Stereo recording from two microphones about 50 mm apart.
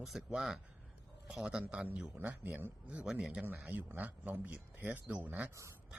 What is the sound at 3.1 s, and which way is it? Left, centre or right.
Speech, centre.